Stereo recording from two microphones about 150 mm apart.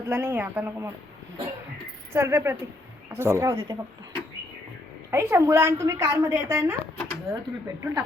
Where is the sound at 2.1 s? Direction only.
15° right (ahead or behind).